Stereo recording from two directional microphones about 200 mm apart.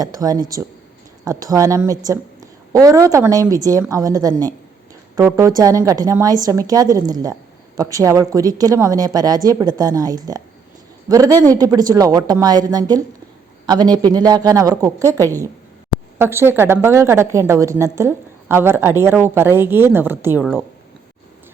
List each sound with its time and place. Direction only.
0.0 s a woman's voice: 20° right (ahead or behind)
11.3 s a man's voice: 10° left (ahead or behind)
11.5 s a woman's voice: 20° right (ahead or behind)